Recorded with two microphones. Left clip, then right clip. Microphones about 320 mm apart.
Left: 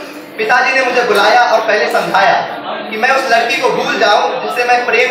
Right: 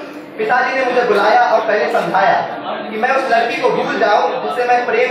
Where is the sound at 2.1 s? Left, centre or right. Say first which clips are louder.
Left 3 dB; centre.